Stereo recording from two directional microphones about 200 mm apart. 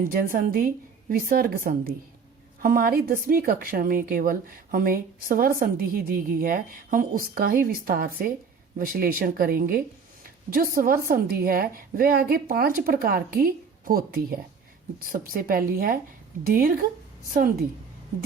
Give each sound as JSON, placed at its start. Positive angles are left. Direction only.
{"t": 0.0, "sound": "speech", "side_deg": -45}